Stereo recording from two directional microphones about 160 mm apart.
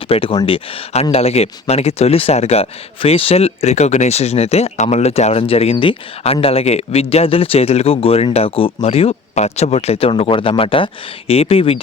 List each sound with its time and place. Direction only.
0.1 s speech: 35° left (ahead or behind)